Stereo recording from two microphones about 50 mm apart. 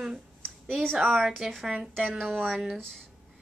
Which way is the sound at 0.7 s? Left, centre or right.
Centre.